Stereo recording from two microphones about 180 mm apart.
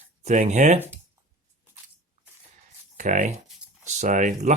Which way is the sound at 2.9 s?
45° right (ahead or behind).